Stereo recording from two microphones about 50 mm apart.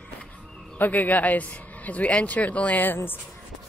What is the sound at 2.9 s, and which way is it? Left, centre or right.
Speech, left.